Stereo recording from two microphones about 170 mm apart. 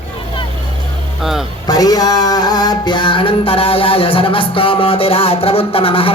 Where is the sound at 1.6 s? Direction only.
20° left (ahead or behind).